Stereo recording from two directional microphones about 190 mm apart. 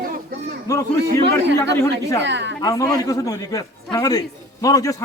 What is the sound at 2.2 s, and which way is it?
Speech, 70° right (ahead or behind).